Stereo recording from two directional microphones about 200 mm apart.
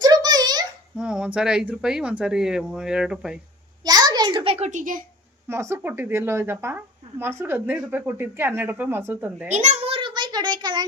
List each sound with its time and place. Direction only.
0.0 s a sound: 20° right (ahead or behind)
0.9 s speech: 5° right (ahead or behind)
3.8 s a child's voice: 20° right (ahead or behind); by 5.0 s 40° right (ahead or behind)
5.5 s speech: 10° right (ahead or behind)
9.5 s a child's voice: 35° right (ahead or behind)